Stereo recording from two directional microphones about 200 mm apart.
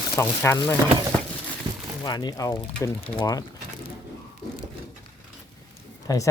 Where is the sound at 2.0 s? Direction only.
20° left (ahead or behind).